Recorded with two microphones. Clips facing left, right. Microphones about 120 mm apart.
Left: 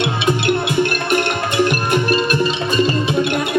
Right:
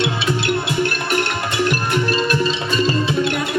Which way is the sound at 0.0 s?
20° left (ahead or behind).